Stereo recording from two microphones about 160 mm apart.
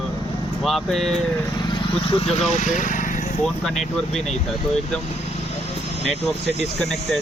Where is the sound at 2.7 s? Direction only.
55° left (ahead or behind).